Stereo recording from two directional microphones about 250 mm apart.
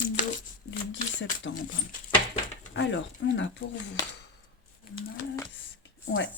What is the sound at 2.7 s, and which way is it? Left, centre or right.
Speech, left.